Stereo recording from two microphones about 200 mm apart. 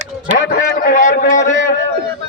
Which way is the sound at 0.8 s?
40° left (ahead or behind).